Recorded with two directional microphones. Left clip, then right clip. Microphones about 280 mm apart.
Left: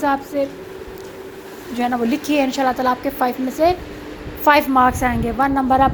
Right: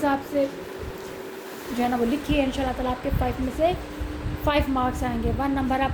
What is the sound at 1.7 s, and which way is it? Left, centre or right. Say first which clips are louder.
A woman's voice: left 4 dB; centre.